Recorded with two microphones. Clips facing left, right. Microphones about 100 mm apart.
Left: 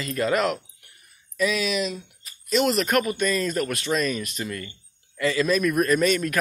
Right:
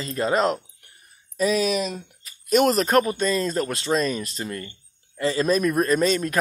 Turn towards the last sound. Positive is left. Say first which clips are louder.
# even
turn(degrees=-30)  # may be behind; listen again after turning